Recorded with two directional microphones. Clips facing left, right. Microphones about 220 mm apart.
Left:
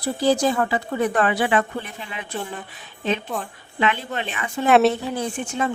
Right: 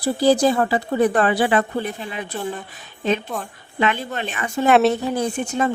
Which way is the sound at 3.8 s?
45° right (ahead or behind).